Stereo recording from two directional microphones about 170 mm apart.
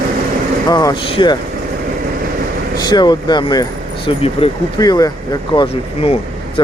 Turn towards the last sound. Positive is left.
turn(degrees=25)  # may be behind; listen again after turning